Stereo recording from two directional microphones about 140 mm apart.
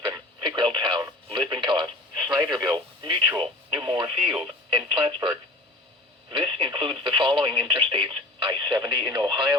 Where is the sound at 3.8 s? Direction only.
40° right (ahead or behind).